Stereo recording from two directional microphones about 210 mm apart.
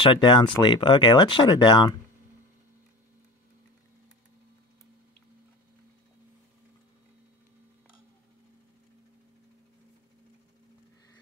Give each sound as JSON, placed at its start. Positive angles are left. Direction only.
{"t": 0.0, "sound": "speech", "side_deg": 25}